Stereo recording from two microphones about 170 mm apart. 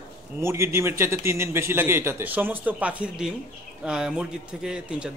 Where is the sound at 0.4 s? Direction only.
15° right (ahead or behind).